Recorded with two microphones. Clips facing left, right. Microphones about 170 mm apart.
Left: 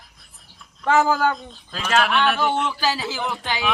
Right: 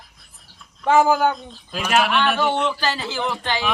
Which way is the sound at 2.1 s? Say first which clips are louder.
Right 1 dB; centre (ahead or behind).